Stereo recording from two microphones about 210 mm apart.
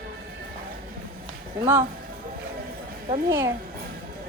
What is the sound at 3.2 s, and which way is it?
Speech, 15° right (ahead or behind).